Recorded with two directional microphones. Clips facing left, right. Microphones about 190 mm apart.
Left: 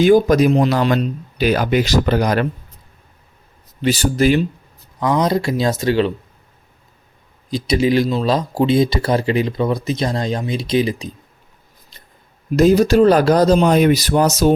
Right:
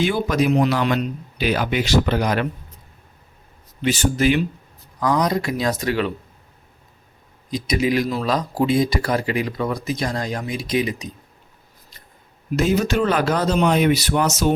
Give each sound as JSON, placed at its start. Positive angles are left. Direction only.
{"t": 0.0, "sound": "speech", "side_deg": 40}
{"t": 3.8, "sound": "speech", "side_deg": 35}
{"t": 7.5, "sound": "speech", "side_deg": 30}
{"t": 12.5, "sound": "speech", "side_deg": 35}